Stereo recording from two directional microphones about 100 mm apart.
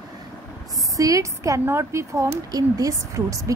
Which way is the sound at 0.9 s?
35° right (ahead or behind).